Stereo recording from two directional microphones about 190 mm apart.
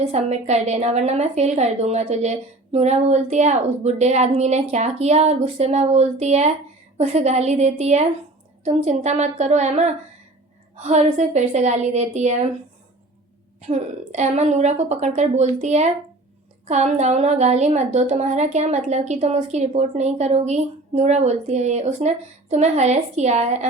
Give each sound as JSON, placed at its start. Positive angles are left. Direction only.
{"t": 0.0, "sound": "a woman's voice", "side_deg": -35}
{"t": 13.6, "sound": "a woman's voice", "side_deg": -35}